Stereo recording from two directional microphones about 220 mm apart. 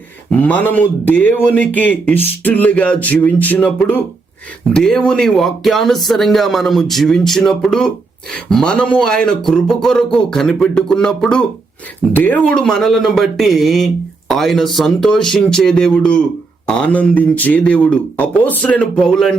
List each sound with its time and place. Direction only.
0.3 s speech: 5° left (ahead or behind)